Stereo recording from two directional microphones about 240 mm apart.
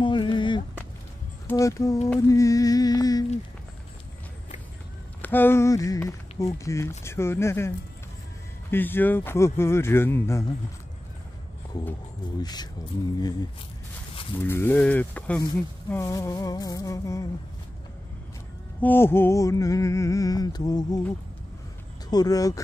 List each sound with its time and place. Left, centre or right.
0.0 s a sound: centre
1.5 s speech: centre
5.2 s speech: centre
12.4 s speech: centre
14.4 s speech: centre
18.8 s speech: centre
22.1 s speech: centre